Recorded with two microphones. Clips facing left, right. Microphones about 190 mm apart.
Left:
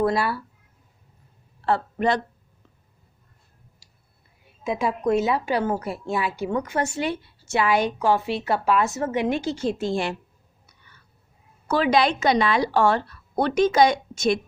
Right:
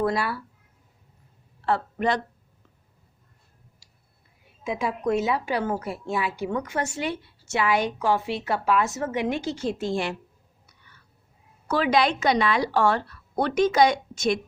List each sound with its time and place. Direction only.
0.0 s a woman's voice: 30° left (ahead or behind)
1.6 s speech: 30° left (ahead or behind)
4.6 s a woman's voice: 35° left (ahead or behind)
11.7 s a woman's voice: 30° left (ahead or behind)